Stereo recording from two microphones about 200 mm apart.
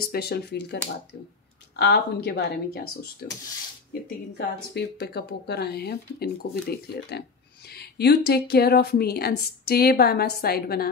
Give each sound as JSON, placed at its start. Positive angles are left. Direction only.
{"t": 0.0, "sound": "speech", "side_deg": 50}
{"t": 1.8, "sound": "speech", "side_deg": 55}
{"t": 4.7, "sound": "speech", "side_deg": 55}